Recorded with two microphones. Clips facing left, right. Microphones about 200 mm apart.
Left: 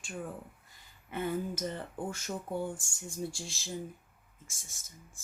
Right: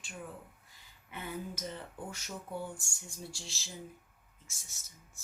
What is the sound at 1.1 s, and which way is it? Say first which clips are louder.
Speech: left 7 dB; 50° left (ahead or behind).